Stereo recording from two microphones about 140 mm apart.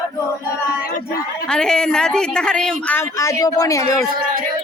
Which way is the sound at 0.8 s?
90° left.